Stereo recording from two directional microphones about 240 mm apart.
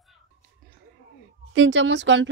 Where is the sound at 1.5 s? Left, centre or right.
Right.